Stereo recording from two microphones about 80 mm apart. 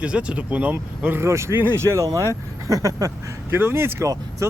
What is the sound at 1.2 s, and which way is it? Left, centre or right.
Speech, right.